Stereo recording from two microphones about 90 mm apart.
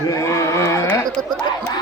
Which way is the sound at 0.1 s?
35° left (ahead or behind).